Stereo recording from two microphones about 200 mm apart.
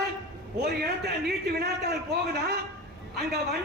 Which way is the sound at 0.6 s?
55° right (ahead or behind).